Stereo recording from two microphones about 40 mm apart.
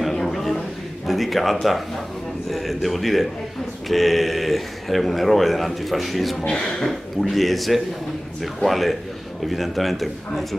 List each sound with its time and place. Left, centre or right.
0.1 s a sound: centre
2.5 s a man's voice: centre
6.3 s speech: left
6.8 s a man's voice: centre